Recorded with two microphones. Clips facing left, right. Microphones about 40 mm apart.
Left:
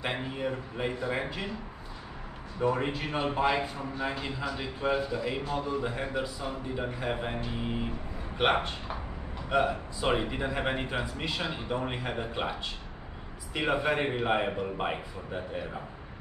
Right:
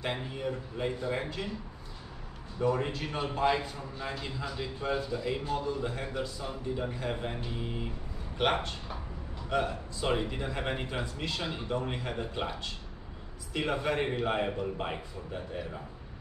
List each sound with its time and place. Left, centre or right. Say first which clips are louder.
0.0 s a man's voice: left 2 dB; centre
2.6 s a man's voice: left 1 dB; centre